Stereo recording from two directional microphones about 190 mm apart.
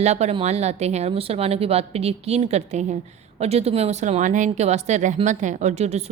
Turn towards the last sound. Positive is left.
turn(degrees=-35)  # may be behind; listen again after turning